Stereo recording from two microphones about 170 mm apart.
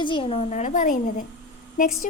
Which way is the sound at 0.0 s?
30° left (ahead or behind).